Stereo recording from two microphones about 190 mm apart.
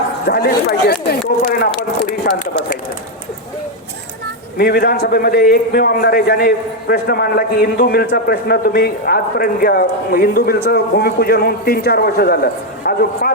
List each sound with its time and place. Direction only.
0.3 s a man's voice: 55° left (ahead or behind)
4.5 s a man's voice: 55° left (ahead or behind)